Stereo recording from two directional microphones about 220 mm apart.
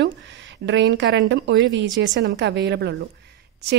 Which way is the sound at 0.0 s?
55° right (ahead or behind).